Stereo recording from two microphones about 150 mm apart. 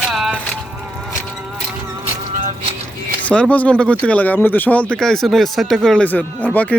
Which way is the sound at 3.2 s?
10° left (ahead or behind).